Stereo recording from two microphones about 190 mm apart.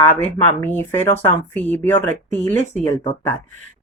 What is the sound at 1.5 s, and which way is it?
Speech, 10° left (ahead or behind).